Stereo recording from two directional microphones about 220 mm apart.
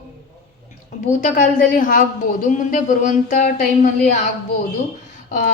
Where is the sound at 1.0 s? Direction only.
35° left (ahead or behind).